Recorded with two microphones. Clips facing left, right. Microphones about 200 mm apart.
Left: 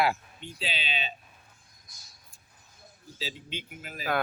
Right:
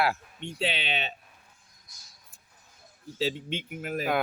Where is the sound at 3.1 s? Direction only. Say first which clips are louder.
Right 9 dB; 60° right (ahead or behind).